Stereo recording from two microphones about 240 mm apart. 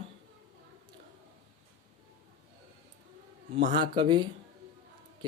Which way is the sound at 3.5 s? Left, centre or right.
Right.